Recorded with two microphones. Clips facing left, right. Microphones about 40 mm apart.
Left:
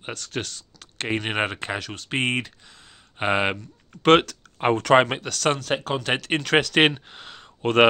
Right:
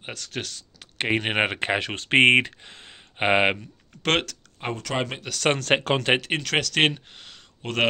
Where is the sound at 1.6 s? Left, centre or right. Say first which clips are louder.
Right 5 dB; right.